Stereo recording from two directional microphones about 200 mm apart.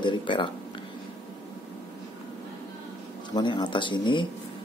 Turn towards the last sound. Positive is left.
turn(degrees=25)  # may be behind; listen again after turning